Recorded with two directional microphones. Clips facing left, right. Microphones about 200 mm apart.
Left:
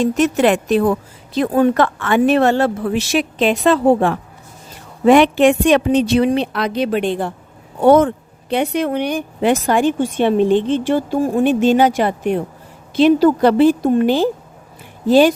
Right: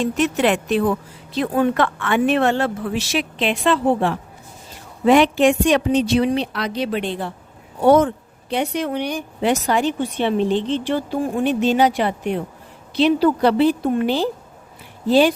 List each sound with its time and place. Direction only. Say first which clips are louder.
0.0 s a woman's voice: left 4 dB; 45° left (ahead or behind)
5.0 s a woman's voice: left 3 dB; 55° left (ahead or behind)